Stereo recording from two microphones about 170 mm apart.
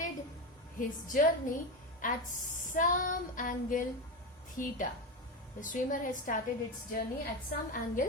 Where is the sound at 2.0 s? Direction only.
50° left (ahead or behind).